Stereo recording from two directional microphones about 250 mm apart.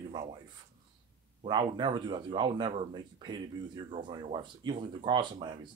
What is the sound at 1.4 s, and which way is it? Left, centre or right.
Speech, centre.